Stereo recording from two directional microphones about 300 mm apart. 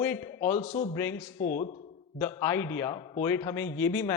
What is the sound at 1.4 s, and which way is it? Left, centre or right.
Speech, left.